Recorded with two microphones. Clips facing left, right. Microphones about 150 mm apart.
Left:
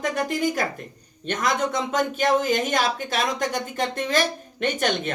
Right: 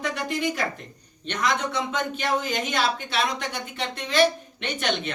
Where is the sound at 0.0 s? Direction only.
45° left (ahead or behind).